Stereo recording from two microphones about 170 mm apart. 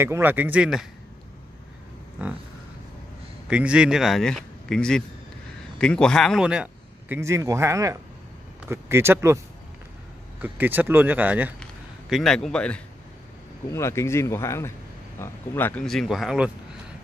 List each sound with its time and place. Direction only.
0.0 s speech: 10° right (ahead or behind)
3.4 s a man's voice: 5° right (ahead or behind)
7.2 s speech: 15° right (ahead or behind)
10.4 s speech: 10° right (ahead or behind)
11.6 s a man's voice: centre (ahead or behind)
13.7 s speech: 15° left (ahead or behind); by 16.5 s 5° right (ahead or behind)